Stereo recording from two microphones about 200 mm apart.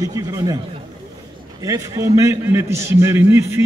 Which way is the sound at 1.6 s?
15° right (ahead or behind).